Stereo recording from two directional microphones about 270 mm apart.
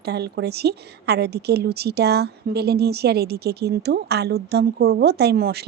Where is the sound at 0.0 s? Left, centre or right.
Right.